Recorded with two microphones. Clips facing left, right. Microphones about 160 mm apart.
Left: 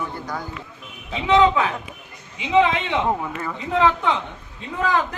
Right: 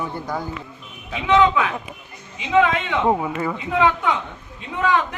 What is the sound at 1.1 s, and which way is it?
Speech, 30° left (ahead or behind).